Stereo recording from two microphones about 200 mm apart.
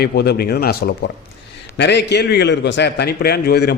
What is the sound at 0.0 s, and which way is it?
A man's voice, 50° left (ahead or behind).